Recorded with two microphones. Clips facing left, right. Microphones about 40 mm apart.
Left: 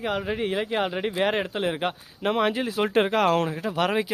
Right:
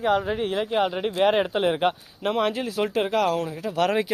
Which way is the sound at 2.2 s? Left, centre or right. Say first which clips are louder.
Even; centre.